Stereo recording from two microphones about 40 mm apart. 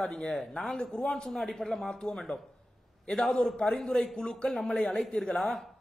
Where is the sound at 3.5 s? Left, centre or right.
Centre.